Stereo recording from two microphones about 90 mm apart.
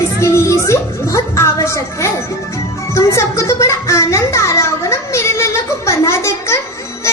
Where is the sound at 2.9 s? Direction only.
35° left (ahead or behind).